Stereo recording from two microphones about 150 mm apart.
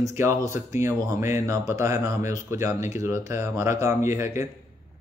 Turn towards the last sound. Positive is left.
turn(degrees=-15)  # may be behind; listen again after turning